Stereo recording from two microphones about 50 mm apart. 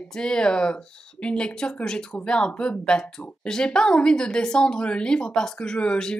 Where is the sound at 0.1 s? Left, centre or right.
Centre.